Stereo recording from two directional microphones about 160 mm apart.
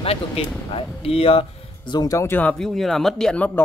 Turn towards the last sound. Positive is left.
turn(degrees=10)  # may be behind; listen again after turning